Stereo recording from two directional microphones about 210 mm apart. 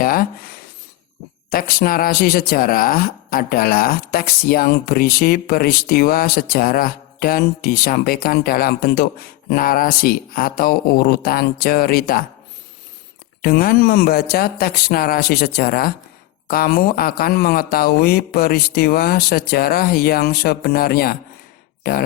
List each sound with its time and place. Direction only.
0.0 s a sound: 45° left (ahead or behind)
1.5 s speech: 45° left (ahead or behind)
13.4 s speech: 45° left (ahead or behind)